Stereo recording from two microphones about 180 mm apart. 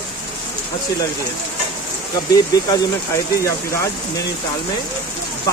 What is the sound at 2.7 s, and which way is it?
Speech, 15° left (ahead or behind).